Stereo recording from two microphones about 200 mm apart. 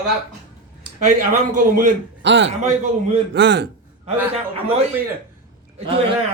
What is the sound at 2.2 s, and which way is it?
A man's voice, 65° right (ahead or behind).